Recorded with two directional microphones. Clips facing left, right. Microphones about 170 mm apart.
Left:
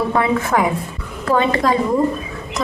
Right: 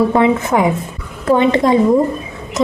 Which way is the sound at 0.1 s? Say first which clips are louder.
Right 4 dB; 20° right (ahead or behind).